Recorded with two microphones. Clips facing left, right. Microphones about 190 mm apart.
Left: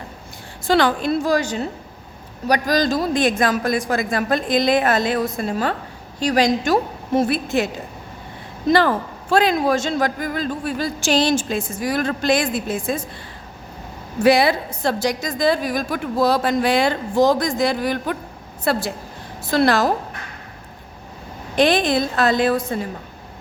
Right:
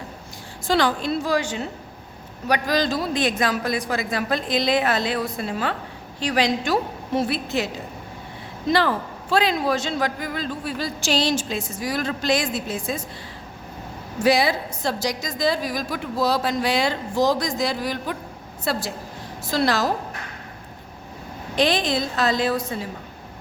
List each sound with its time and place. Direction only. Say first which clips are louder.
0.7 s a man's voice: left 4 dB; 60° left (ahead or behind)
8.7 s a man's voice: left 4 dB; 50° left (ahead or behind)
14.3 s a woman's voice: left 4 dB; 60° left (ahead or behind)
21.5 s a man's voice: left 4 dB; 55° left (ahead or behind)